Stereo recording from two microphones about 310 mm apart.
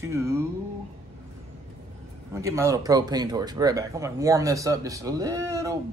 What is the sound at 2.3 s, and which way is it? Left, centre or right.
Speech, centre.